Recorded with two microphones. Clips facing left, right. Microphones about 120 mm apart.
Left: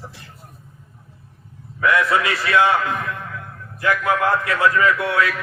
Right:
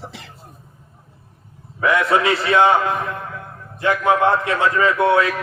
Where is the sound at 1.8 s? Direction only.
25° right (ahead or behind).